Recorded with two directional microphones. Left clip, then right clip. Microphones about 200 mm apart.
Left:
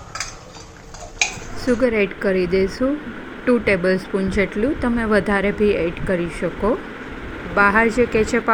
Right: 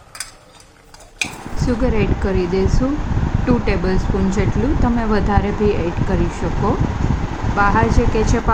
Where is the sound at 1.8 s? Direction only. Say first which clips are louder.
Left 2 dB; 15° left (ahead or behind).